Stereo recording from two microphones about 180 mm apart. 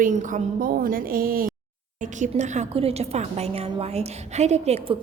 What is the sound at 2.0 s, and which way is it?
A woman's voice, 40° right (ahead or behind).